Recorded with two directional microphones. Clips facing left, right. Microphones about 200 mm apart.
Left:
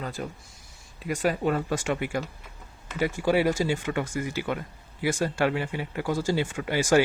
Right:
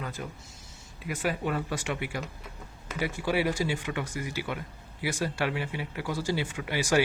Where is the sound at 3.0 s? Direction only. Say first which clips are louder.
Left 5 dB; 45° left (ahead or behind).